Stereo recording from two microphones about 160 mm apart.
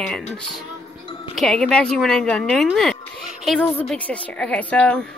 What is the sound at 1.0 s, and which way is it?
Music, 35° left (ahead or behind).